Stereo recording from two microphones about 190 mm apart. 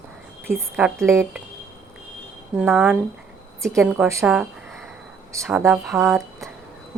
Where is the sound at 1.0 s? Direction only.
15° right (ahead or behind).